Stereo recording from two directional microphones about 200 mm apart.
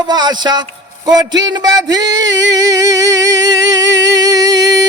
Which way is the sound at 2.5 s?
20° right (ahead or behind).